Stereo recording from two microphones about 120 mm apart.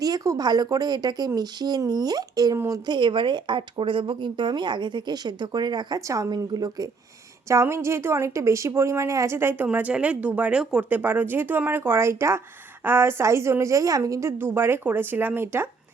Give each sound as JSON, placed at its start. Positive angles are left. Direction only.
{"t": 0.0, "sound": "a woman's voice", "side_deg": -30}